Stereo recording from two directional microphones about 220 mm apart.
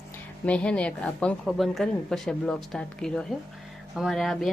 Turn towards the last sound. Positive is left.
turn(degrees=0)  # may be behind; listen again after turning